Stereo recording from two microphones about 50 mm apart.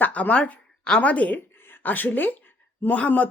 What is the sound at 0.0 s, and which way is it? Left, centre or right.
A woman's voice, left.